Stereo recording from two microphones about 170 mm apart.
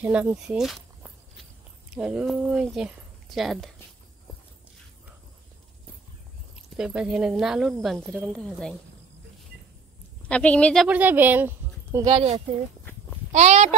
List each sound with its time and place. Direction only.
0.0 s speech: 10° right (ahead or behind)
2.0 s speech: 5° right (ahead or behind)
6.8 s speech: 5° right (ahead or behind)
10.2 s a woman's voice: 5° left (ahead or behind)
10.9 s speech: 10° right (ahead or behind)
12.1 s speech: 35° right (ahead or behind)